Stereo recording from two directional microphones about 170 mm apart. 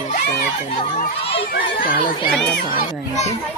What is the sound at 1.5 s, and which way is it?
Speech, 60° left (ahead or behind).